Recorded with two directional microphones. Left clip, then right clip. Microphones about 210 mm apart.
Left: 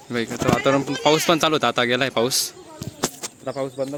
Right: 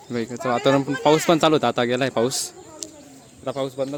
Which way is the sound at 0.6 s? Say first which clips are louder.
Right 3 dB; 20° right (ahead or behind).